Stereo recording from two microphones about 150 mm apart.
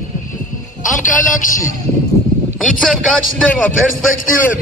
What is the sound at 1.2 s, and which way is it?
Speech, 60° left (ahead or behind).